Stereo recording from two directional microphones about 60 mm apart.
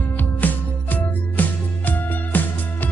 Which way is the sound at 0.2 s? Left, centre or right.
Left.